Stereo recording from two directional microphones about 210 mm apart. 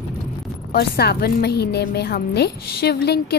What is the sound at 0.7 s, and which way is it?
A woman's voice, 50° left (ahead or behind).